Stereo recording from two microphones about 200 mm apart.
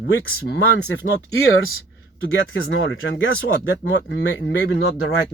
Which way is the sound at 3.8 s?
60° left (ahead or behind).